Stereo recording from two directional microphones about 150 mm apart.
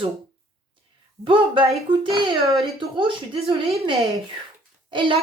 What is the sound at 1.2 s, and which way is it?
Speech, 35° right (ahead or behind).